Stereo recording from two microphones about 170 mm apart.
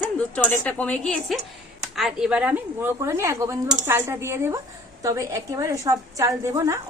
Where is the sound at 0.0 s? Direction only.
5° left (ahead or behind).